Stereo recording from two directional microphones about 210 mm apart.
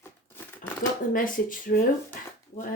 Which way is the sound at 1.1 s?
40° left (ahead or behind).